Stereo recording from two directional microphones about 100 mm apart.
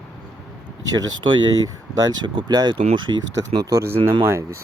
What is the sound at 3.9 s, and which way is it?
Speech, 60° right (ahead or behind).